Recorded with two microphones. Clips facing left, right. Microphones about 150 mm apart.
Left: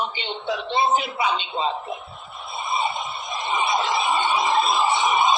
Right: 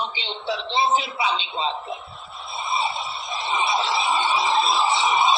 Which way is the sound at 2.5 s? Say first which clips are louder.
Left 1 dB; 50° left (ahead or behind).